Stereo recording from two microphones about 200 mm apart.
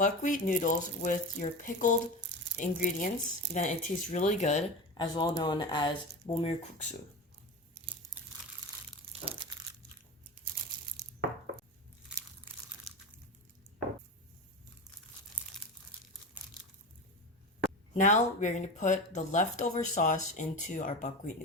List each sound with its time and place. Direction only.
0.0 s speech: 40° left (ahead or behind)
4.9 s speech: 25° left (ahead or behind)
13.7 s a sound: 50° right (ahead or behind)
17.9 s speech: 35° left (ahead or behind)